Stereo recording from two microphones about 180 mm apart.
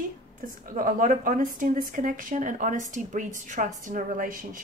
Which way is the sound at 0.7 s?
50° right (ahead or behind).